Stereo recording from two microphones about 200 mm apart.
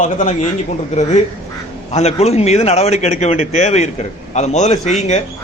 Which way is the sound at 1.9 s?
30° left (ahead or behind).